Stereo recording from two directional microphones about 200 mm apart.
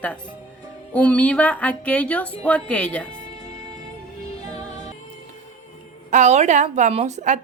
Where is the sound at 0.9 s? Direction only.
5° left (ahead or behind).